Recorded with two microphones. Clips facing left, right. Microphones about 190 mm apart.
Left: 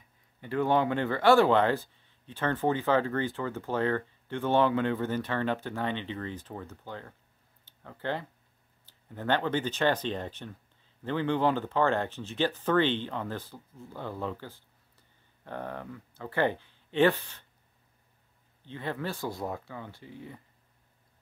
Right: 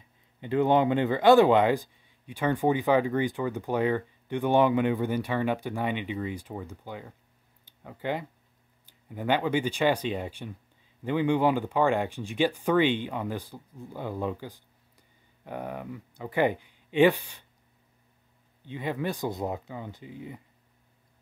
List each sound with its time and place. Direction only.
0.4 s speech: 20° right (ahead or behind)
18.7 s speech: 15° right (ahead or behind)